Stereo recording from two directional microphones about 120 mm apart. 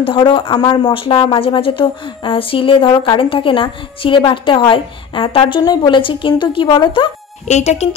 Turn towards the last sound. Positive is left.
turn(degrees=70)  # may be behind; listen again after turning